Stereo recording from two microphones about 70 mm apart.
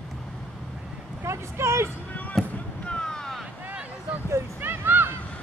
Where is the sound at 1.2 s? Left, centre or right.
Right.